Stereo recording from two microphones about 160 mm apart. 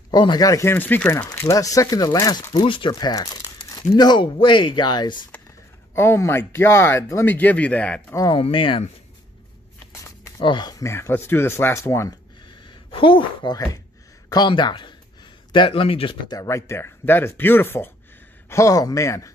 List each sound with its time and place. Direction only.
0.1 s speech: 25° left (ahead or behind)
5.9 s speech: 15° left (ahead or behind)
8.4 s speech: 35° left (ahead or behind)
10.4 s speech: 30° left (ahead or behind)
10.8 s speech: 15° left (ahead or behind)
12.6 s a woman's voice: 30° left (ahead or behind)